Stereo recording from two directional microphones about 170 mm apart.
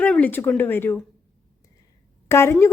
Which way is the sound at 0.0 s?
10° left (ahead or behind).